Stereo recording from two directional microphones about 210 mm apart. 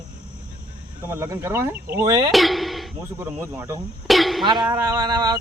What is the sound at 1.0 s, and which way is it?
Speech, 10° right (ahead or behind).